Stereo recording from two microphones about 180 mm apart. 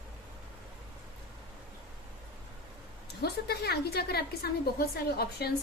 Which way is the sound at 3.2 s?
65° left (ahead or behind).